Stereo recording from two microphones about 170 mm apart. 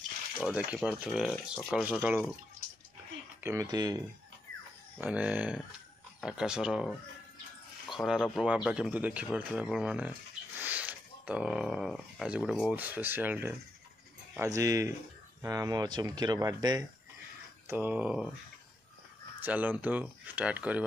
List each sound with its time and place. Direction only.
0.4 s speech: 5° right (ahead or behind)
3.4 s speech: 20° right (ahead or behind)
4.9 s speech: 10° right (ahead or behind)
19.4 s speech: 10° right (ahead or behind)